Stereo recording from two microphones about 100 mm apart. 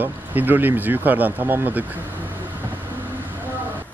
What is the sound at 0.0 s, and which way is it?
Speech, 20° right (ahead or behind).